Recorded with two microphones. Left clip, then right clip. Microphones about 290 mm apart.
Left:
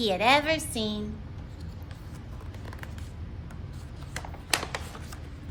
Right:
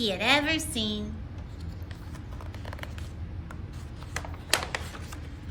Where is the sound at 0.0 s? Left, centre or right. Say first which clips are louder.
Left 2 dB; centre.